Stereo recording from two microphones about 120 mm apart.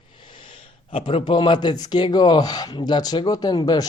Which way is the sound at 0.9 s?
50° left (ahead or behind).